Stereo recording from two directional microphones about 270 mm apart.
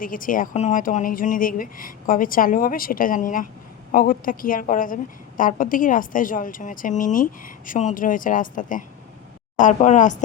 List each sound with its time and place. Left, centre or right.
0.0 s speech: left